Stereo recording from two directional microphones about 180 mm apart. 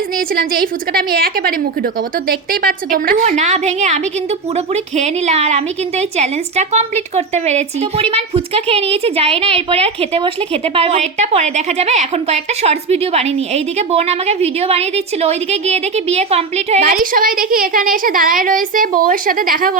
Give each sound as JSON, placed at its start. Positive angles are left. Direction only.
{"t": 0.3, "sound": "a woman's voice", "side_deg": -55}
{"t": 3.2, "sound": "a woman's voice", "side_deg": -40}
{"t": 16.9, "sound": "a woman's voice", "side_deg": -50}